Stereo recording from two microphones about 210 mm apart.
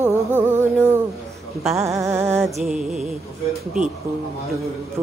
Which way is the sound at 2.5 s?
Centre (ahead or behind).